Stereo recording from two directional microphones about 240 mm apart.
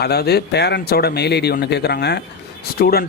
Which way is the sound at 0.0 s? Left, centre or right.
Left.